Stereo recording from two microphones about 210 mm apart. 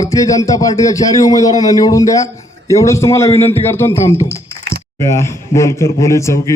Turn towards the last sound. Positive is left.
turn(degrees=15)  # may be behind; listen again after turning